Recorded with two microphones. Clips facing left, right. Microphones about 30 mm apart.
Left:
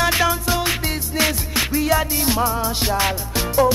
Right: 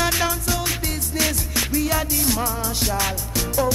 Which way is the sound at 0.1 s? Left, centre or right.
Left.